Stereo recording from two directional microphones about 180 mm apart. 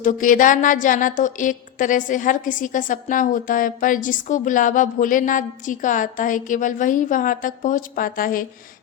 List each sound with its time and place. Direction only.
0.0 s a woman's voice: 45° left (ahead or behind)